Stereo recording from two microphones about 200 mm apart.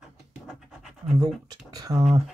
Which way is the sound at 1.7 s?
15° right (ahead or behind).